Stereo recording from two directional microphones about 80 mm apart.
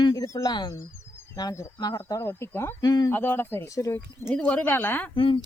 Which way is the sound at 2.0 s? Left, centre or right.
Left.